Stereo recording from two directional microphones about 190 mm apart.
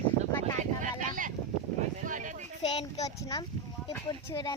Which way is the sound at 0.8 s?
45° right (ahead or behind).